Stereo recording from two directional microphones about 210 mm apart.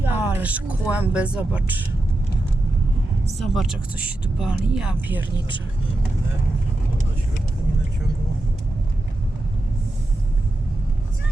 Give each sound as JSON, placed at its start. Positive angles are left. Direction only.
{"t": 0.0, "sound": "speech", "side_deg": -10}
{"t": 3.3, "sound": "speech", "side_deg": 0}